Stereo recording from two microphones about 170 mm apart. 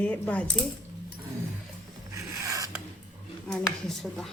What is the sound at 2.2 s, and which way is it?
Zipper, 20° right (ahead or behind).